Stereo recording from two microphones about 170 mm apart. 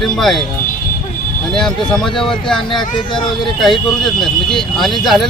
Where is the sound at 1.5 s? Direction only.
5° left (ahead or behind).